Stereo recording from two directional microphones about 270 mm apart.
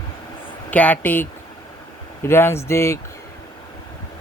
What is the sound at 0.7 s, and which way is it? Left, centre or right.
Speech, centre.